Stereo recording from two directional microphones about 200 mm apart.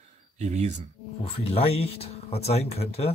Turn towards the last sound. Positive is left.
turn(degrees=30)  # may be behind; listen again after turning